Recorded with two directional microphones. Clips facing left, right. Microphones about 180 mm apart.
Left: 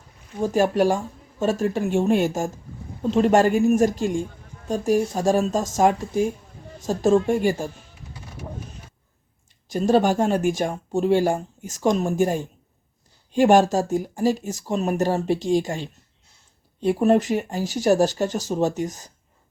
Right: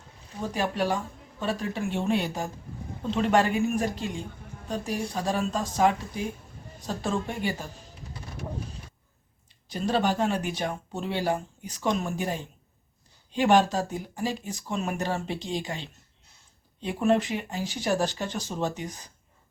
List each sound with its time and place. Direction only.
0.4 s speech: 45° left (ahead or behind)
9.6 s speech: 45° left (ahead or behind)